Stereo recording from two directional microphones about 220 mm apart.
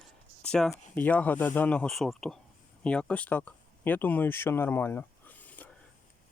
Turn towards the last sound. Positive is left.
turn(degrees=5)  # may be behind; listen again after turning